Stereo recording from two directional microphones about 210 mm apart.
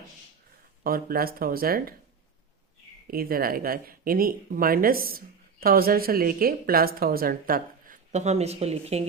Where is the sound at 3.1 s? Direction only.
45° right (ahead or behind).